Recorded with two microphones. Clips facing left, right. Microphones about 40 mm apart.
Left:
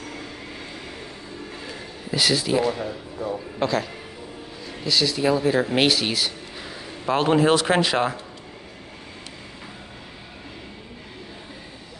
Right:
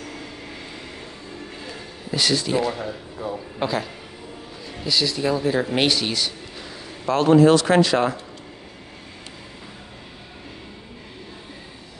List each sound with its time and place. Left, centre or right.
1.7 s speech: centre
7.1 s speech: left